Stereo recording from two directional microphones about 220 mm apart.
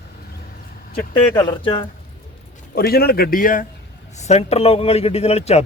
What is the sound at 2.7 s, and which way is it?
A man's voice, 45° left (ahead or behind).